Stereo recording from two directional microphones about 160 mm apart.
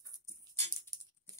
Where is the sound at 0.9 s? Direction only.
20° right (ahead or behind).